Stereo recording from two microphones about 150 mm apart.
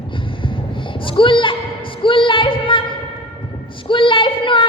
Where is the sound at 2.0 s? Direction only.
35° left (ahead or behind).